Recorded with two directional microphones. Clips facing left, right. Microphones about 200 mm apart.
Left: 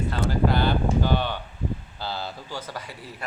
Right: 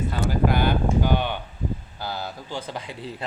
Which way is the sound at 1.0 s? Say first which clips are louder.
Right 1 dB; 15° right (ahead or behind).